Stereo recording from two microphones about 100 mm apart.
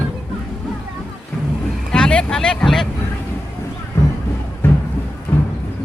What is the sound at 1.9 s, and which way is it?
Vehicle, 10° left (ahead or behind).